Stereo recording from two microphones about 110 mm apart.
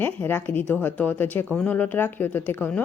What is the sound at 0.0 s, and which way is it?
A woman's voice, 20° left (ahead or behind).